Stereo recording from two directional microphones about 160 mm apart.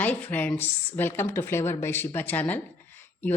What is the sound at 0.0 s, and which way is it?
Speech, 10° left (ahead or behind).